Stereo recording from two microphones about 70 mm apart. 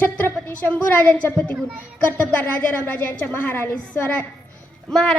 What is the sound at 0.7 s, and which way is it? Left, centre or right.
Child singing, centre.